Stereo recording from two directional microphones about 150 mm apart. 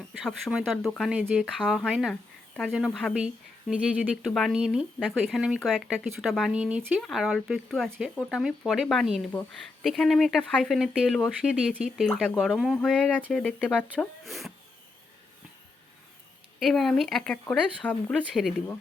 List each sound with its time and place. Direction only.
0.1 s speech: centre (ahead or behind)
14.3 s speech: centre (ahead or behind)
16.6 s speech: centre (ahead or behind)